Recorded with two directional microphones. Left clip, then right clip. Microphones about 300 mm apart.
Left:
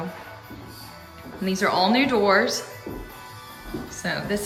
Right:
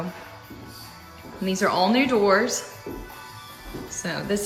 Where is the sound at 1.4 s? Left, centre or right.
Centre.